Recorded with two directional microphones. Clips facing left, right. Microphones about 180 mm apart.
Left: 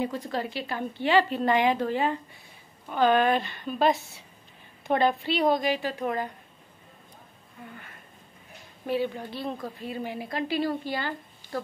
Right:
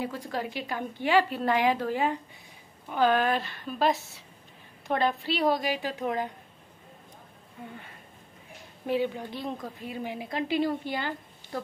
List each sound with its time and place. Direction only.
0.0 s a woman's voice: 10° right (ahead or behind)
8.8 s a woman's voice: 15° right (ahead or behind)